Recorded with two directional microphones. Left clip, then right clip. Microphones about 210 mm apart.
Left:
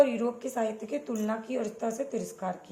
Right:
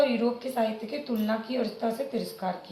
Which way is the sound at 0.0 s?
50° left (ahead or behind).